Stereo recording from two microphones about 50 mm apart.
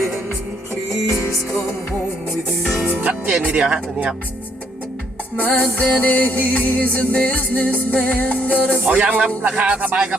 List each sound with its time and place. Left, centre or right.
2.8 s speech: right
3.4 s speech: centre
5.4 s music: left
8.9 s speech: right